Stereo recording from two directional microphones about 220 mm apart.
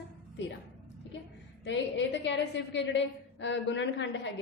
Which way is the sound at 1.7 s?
55° left (ahead or behind).